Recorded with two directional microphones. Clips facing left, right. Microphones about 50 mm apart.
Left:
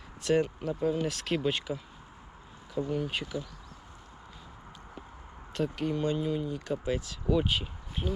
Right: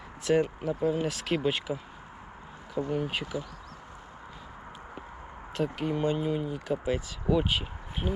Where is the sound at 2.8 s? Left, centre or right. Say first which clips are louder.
Right 1 dB; centre.